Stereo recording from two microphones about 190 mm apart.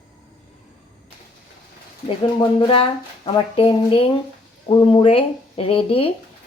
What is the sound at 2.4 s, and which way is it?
Speech, 25° left (ahead or behind).